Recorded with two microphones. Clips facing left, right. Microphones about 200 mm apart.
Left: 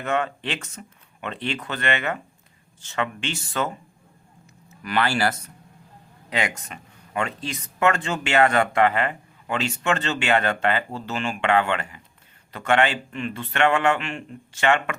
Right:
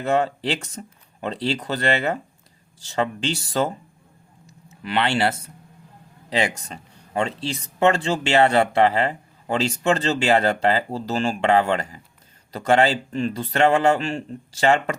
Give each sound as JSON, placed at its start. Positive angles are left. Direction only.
{"t": 0.0, "sound": "speech", "side_deg": -35}
{"t": 4.8, "sound": "speech", "side_deg": -25}